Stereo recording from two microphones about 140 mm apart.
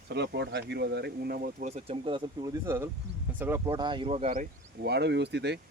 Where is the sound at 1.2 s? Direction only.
90° right.